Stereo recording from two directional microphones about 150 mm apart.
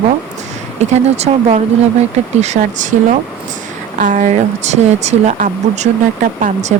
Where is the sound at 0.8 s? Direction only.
45° right (ahead or behind).